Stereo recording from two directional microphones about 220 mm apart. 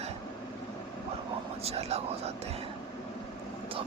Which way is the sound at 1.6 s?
30° right (ahead or behind).